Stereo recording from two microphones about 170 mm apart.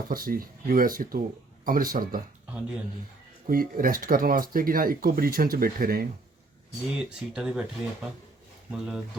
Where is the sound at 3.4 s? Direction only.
55° right (ahead or behind).